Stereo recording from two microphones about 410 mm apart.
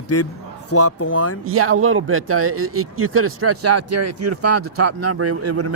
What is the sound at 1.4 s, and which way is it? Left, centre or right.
Speech, right.